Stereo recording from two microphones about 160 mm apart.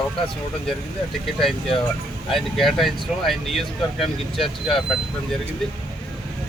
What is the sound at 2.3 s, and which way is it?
Speech, centre (ahead or behind).